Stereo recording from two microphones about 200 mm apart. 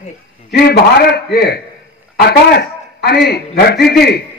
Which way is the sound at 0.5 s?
50° left (ahead or behind).